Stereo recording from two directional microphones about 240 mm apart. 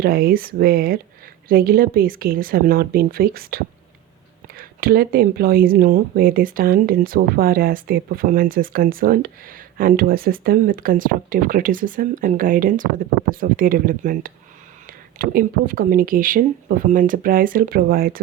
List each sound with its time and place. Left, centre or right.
0.0 s speech: right